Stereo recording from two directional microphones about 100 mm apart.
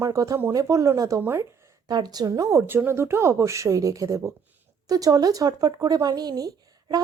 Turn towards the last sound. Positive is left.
turn(degrees=-40)  # may be behind; listen again after turning